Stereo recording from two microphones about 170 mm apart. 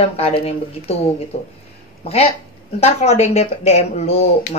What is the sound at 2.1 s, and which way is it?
Speech, 35° left (ahead or behind).